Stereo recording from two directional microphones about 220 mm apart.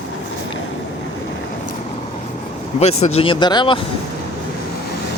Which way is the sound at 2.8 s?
30° left (ahead or behind).